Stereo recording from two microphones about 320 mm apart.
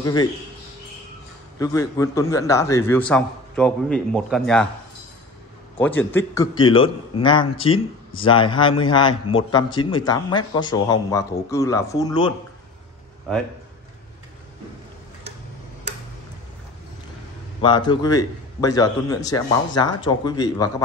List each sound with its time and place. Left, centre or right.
0.0 s a man's voice: centre
1.6 s a man's voice: centre
5.8 s a man's voice: centre
17.6 s a man's voice: centre